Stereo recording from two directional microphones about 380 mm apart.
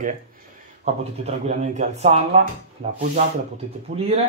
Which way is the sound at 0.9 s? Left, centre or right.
Centre.